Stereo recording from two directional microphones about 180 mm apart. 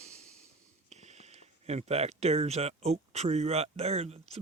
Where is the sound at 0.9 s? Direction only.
40° right (ahead or behind).